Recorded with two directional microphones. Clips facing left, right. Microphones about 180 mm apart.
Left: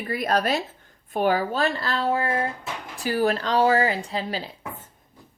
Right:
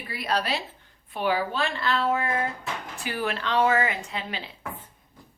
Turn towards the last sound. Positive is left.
turn(degrees=35)  # may be behind; listen again after turning